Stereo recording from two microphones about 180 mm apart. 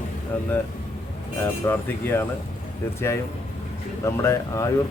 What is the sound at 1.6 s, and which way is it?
Speech, 10° left (ahead or behind).